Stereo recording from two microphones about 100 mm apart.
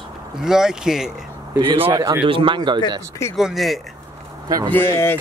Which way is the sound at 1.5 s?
60° right (ahead or behind).